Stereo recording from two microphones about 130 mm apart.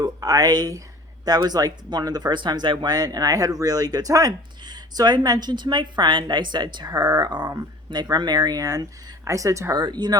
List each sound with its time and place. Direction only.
0.0 s speech: 30° right (ahead or behind)